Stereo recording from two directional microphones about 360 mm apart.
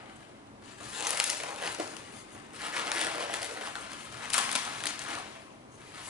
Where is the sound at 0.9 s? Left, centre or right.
Centre.